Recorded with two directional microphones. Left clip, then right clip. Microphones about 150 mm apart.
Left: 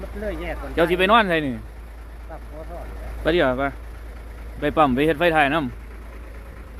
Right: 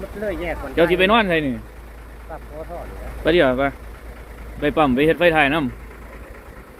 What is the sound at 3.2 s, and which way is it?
Speech, 15° left (ahead or behind).